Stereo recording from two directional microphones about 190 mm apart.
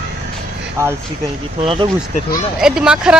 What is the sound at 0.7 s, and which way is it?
Speech, 15° right (ahead or behind).